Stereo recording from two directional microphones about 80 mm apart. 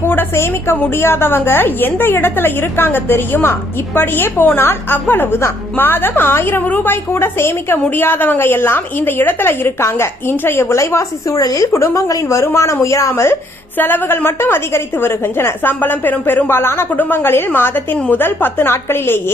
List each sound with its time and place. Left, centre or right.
0.0 s a woman's voice: left
13.7 s a woman's voice: left